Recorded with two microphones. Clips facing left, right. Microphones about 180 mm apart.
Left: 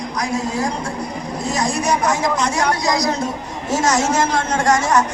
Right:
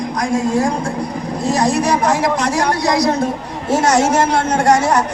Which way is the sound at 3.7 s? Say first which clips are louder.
Right 4 dB; 65° right (ahead or behind).